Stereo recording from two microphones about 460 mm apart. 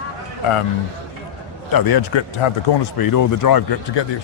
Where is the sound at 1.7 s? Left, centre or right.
Left.